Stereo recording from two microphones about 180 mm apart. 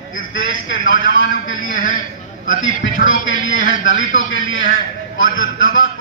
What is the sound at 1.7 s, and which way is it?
Speech, 50° left (ahead or behind).